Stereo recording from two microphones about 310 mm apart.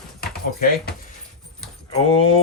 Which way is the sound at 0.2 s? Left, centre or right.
Left.